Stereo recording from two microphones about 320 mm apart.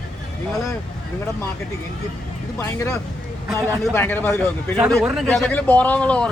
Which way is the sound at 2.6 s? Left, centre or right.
Centre.